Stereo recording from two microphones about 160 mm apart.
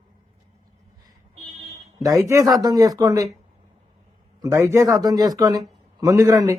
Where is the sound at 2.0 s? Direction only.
20° right (ahead or behind).